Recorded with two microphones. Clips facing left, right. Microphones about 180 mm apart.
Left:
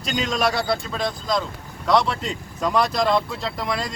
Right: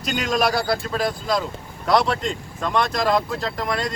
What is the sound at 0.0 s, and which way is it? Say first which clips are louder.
Speech: right 1 dB; 5° right (ahead or behind).